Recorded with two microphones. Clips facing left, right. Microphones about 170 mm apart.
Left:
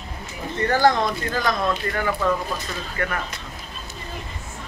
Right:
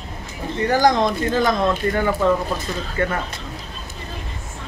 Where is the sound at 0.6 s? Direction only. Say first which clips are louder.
Right 2 dB; 15° right (ahead or behind).